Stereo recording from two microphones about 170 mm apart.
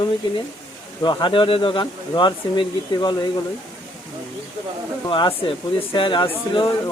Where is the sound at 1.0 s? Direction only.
30° left (ahead or behind).